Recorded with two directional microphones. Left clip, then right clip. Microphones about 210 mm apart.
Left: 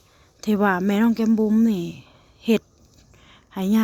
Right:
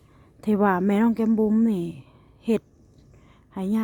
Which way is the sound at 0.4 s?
10° right (ahead or behind).